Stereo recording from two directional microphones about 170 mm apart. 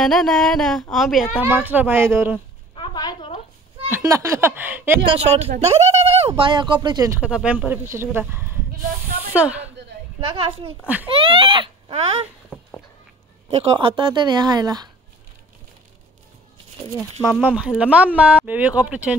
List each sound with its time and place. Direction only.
0.0 s speech: centre (ahead or behind)
1.4 s speech: 10° right (ahead or behind)
2.7 s a sound: 25° left (ahead or behind)
3.9 s speech: 20° right (ahead or behind)
5.0 s speech: 35° right (ahead or behind)
7.2 s speech: 5° right (ahead or behind)
10.2 s speech: 35° right (ahead or behind)
12.5 s a sound: 5° right (ahead or behind)
13.5 s speech: 35° right (ahead or behind)
17.2 s speech: centre (ahead or behind)